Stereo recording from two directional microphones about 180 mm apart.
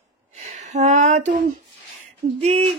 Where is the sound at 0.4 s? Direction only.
40° right (ahead or behind).